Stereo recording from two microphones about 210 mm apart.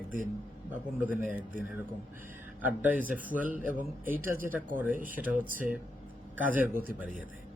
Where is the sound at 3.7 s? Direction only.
40° right (ahead or behind).